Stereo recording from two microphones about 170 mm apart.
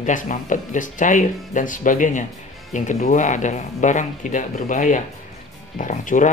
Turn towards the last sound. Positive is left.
turn(degrees=45)  # may be behind; listen again after turning